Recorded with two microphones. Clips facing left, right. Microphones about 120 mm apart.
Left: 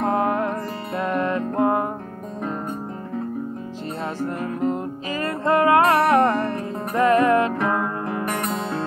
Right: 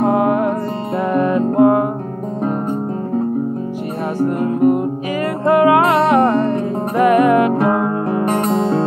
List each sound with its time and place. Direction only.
0.0 s music: 20° right (ahead or behind)
4.4 s music: 20° right (ahead or behind)